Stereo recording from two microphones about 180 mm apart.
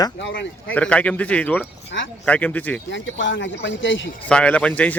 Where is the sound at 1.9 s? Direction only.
75° left (ahead or behind).